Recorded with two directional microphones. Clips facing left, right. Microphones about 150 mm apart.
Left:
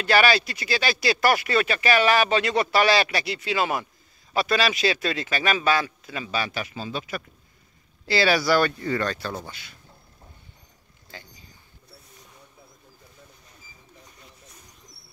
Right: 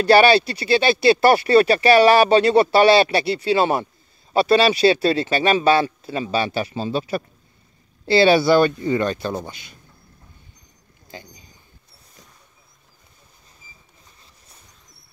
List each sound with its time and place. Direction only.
0.0 s speech: 30° right (ahead or behind)
11.1 s speech: 20° right (ahead or behind)